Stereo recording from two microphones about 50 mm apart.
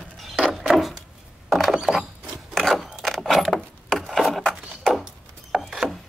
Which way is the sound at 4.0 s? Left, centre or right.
Centre.